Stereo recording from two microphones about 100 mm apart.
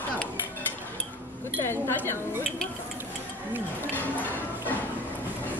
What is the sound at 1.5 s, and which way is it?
Speech, 20° left (ahead or behind).